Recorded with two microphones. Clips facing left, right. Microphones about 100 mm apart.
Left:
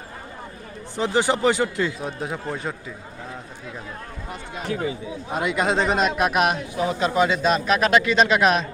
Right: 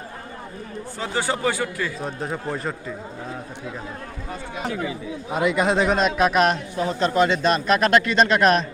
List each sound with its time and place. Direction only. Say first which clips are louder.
0.9 s speech: left 5 dB; 20° left (ahead or behind)
2.0 s speech: right 1 dB; centre (ahead or behind)
5.3 s speech: right 2 dB; centre (ahead or behind)